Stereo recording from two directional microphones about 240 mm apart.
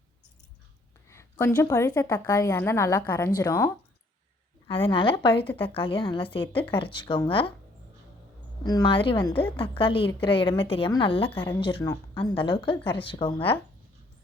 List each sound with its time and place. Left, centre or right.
1.1 s a woman's voice: centre
4.7 s a woman's voice: left
8.6 s a woman's voice: centre